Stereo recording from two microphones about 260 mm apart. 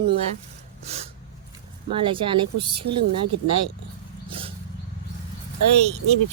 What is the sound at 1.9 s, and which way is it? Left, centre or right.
Speech, centre.